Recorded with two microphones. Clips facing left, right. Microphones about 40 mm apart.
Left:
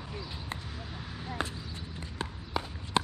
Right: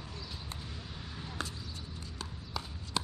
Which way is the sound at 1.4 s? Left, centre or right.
Left.